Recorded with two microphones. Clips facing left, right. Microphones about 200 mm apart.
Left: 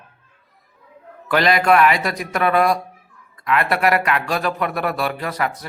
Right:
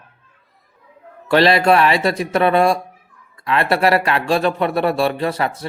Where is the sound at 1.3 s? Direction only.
30° right (ahead or behind).